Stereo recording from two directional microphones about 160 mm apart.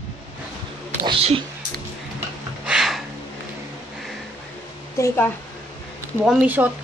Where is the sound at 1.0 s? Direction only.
35° right (ahead or behind).